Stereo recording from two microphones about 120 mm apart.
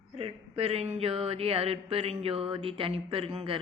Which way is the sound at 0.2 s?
55° right (ahead or behind).